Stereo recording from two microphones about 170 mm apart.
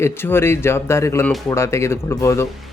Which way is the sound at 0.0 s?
15° left (ahead or behind).